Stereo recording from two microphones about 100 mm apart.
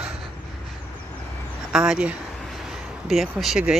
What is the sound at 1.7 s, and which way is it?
Speech, 10° right (ahead or behind).